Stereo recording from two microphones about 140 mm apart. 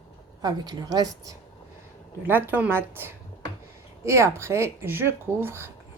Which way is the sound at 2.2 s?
15° right (ahead or behind).